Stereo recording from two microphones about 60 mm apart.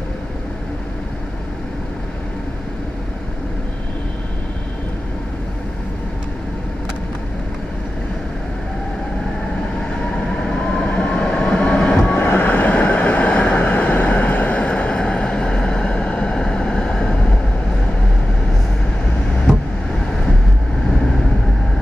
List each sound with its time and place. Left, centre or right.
10.3 s vehicle: centre
12.1 s vehicle: left